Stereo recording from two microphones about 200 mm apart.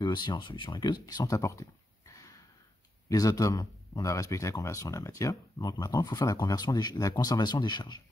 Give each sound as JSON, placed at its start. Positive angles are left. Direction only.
{"t": 0.0, "sound": "speech", "side_deg": 20}
{"t": 1.0, "sound": "a sound", "side_deg": 15}
{"t": 3.1, "sound": "speech", "side_deg": 15}